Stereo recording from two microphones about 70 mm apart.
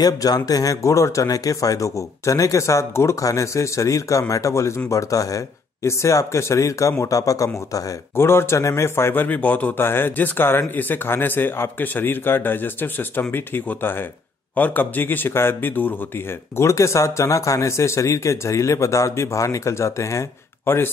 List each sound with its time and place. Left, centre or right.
0.0 s speech: left
8.2 s a man's voice: left
16.5 s speech: left